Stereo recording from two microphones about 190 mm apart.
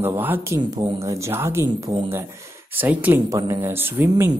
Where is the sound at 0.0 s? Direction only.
10° right (ahead or behind).